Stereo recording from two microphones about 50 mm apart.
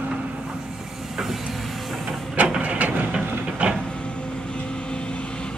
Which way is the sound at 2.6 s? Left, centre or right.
Right.